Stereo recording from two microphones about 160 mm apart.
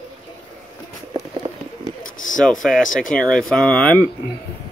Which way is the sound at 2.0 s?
55° left (ahead or behind).